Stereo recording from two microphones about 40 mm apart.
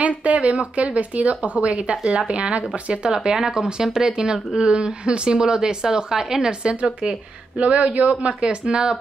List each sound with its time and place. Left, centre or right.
0.0 s speech: right